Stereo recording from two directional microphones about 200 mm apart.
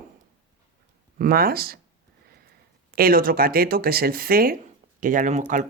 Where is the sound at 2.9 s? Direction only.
45° right (ahead or behind).